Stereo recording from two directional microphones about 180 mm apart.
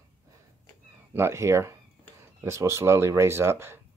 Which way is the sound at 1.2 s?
15° right (ahead or behind).